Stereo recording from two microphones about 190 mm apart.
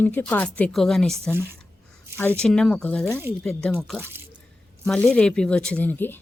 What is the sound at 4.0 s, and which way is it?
Speech, 10° right (ahead or behind).